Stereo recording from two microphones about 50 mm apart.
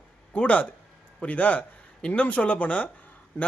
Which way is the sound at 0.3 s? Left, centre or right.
Left.